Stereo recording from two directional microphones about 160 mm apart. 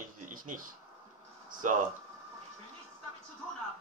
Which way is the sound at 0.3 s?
60° right (ahead or behind).